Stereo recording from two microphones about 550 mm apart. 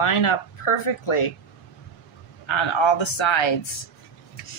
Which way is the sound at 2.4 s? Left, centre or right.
Left.